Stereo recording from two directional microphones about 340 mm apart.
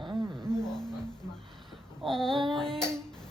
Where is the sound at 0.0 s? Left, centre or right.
Centre.